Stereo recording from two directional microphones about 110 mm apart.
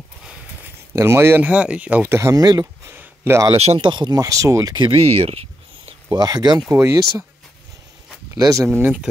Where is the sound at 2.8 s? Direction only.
20° right (ahead or behind).